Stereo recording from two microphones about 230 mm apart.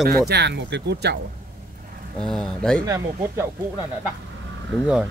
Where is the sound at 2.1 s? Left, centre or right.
Centre.